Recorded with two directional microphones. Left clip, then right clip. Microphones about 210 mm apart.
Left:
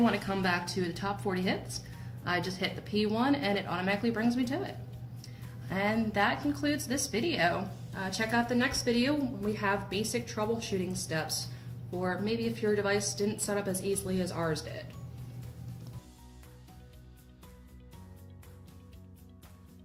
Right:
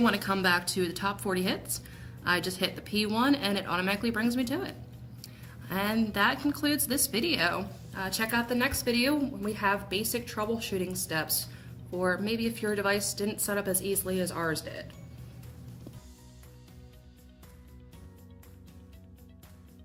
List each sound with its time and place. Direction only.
0.0 s a woman's voice: 50° right (ahead or behind)